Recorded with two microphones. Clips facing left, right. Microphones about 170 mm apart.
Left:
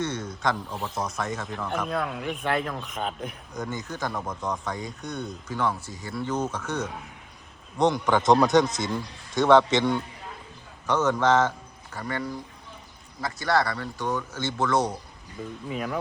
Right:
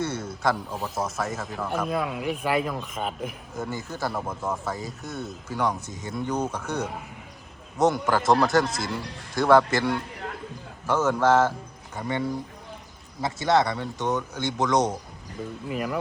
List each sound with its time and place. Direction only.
0.0 s speech: 5° right (ahead or behind)
11.9 s speech: 20° right (ahead or behind)
13.2 s speech: 20° right (ahead or behind)
15.7 s speech: 5° right (ahead or behind)